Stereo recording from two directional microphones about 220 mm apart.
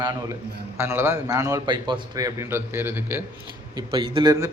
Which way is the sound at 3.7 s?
20° right (ahead or behind).